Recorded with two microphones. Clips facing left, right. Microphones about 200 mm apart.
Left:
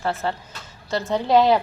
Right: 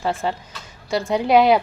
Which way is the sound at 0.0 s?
15° right (ahead or behind).